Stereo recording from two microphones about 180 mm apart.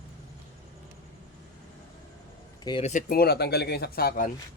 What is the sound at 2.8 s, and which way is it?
Speech, 40° left (ahead or behind).